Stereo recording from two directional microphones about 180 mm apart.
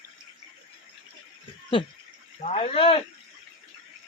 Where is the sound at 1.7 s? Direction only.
30° left (ahead or behind).